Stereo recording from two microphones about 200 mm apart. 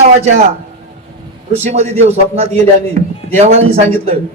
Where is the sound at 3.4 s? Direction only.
35° right (ahead or behind).